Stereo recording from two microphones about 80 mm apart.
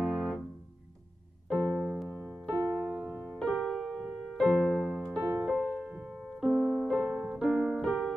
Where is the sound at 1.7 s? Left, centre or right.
Centre.